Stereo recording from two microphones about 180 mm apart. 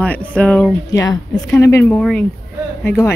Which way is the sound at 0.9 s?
20° left (ahead or behind).